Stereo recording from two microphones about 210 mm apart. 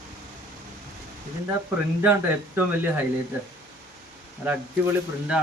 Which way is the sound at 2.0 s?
10° right (ahead or behind).